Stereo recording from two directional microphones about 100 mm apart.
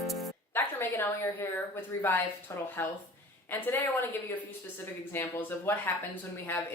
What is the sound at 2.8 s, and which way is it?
Speech, 20° left (ahead or behind).